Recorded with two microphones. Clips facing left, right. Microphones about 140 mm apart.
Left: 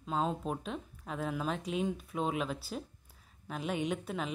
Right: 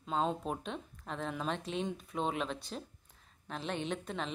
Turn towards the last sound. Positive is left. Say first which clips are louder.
# left 2 dB
turn(degrees=5)  # may be behind; listen again after turning